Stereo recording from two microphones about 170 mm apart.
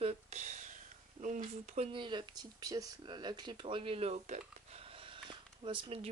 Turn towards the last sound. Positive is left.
turn(degrees=-30)  # may be behind; listen again after turning